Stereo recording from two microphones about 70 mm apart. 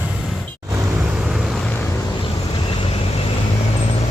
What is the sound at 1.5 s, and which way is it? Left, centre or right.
Vehicle, centre.